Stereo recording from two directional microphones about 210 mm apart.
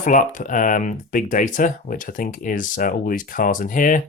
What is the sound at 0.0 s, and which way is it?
Speech, 40° left (ahead or behind).